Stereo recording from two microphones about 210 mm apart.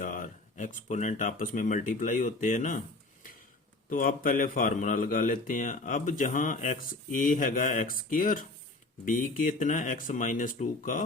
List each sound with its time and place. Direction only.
0.0 s a man's voice: 40° left (ahead or behind)
3.8 s a man's voice: 40° left (ahead or behind)